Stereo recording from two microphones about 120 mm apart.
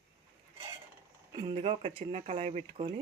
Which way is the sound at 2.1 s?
75° right (ahead or behind).